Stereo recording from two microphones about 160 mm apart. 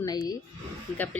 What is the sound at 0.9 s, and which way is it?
Speech, 10° left (ahead or behind).